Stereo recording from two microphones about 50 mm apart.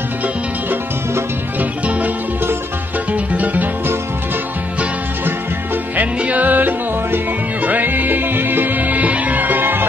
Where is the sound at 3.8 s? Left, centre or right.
Right.